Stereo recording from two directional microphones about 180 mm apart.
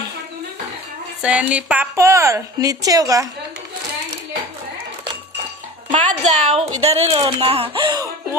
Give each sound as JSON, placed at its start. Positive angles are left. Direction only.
{"t": 1.2, "sound": "a woman's voice", "side_deg": -5}
{"t": 5.9, "sound": "a woman's voice", "side_deg": -40}